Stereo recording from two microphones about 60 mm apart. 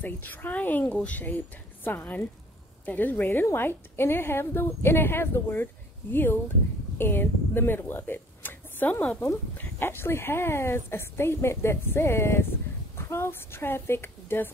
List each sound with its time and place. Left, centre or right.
0.0 s a woman's voice: left
1.9 s a woman's voice: left
7.9 s a sound: left
9.6 s speech: left